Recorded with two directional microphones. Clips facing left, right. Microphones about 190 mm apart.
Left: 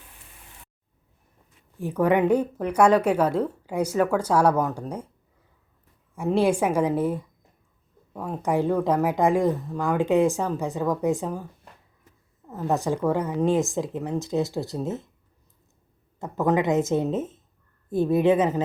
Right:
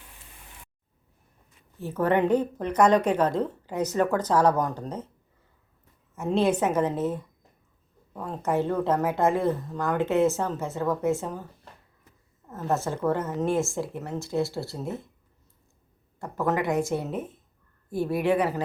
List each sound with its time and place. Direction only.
1.8 s a woman's voice: 15° left (ahead or behind)
6.1 s a woman's voice: 10° left (ahead or behind)
12.5 s a woman's voice: 15° left (ahead or behind)
16.2 s speech: 20° left (ahead or behind)